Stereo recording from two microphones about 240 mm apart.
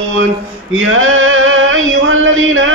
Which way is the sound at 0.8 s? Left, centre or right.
Right.